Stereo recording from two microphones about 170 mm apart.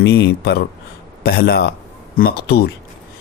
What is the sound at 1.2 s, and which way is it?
Speech, 65° left (ahead or behind).